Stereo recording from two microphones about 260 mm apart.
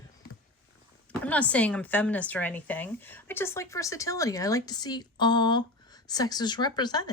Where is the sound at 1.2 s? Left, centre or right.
Centre.